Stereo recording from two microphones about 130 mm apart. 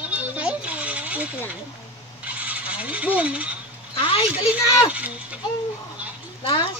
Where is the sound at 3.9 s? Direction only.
45° left (ahead or behind).